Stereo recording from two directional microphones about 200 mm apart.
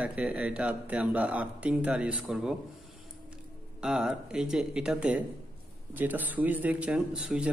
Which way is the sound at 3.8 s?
5° right (ahead or behind).